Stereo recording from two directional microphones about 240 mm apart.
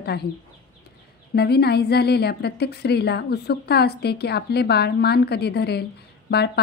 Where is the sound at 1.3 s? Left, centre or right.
Left.